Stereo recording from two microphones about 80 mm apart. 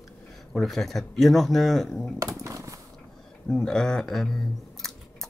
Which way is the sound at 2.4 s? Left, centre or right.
Right.